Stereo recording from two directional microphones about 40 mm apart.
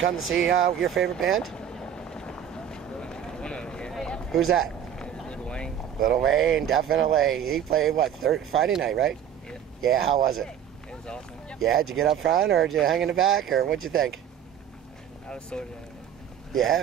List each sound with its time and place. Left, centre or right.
0.2 s speech: centre
1.5 s run: centre
5.3 s boat: left
6.0 s speech: centre
10.9 s vehicle: left
11.6 s speech: centre
13.7 s speech: centre
15.2 s speech: left
16.5 s speech: centre